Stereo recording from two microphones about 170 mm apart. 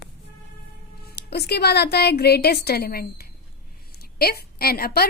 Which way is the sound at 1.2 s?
70° left (ahead or behind).